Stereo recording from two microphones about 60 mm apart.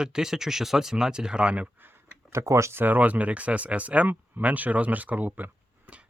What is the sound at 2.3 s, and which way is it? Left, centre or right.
Speech, right.